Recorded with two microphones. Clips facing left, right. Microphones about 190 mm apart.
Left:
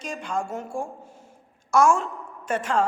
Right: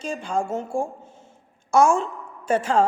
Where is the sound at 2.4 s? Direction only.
30° right (ahead or behind).